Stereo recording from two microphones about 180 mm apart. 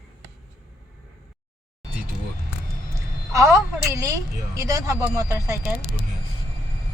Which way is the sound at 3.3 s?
15° right (ahead or behind).